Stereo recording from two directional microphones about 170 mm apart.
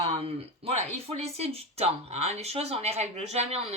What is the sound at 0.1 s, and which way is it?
Speech, 35° right (ahead or behind).